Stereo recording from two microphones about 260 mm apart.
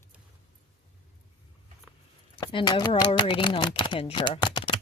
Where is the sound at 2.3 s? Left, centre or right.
Centre.